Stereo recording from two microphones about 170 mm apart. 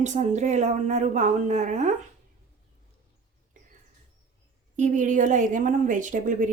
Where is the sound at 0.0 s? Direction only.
45° right (ahead or behind).